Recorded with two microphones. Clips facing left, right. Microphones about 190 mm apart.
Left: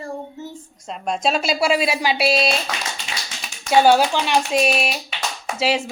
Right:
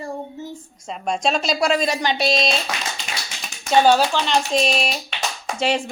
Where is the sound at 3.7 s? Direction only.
10° left (ahead or behind).